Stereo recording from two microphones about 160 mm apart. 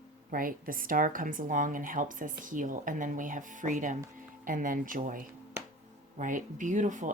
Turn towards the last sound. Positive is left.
turn(degrees=-50)  # may be behind; listen again after turning